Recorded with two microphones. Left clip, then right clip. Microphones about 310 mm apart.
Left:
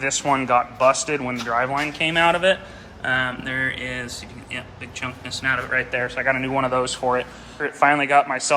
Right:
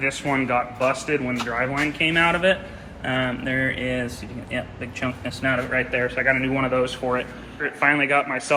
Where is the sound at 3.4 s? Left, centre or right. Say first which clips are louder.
Even; left.